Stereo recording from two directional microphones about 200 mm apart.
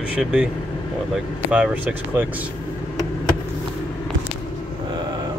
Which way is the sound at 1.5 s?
5° right (ahead or behind).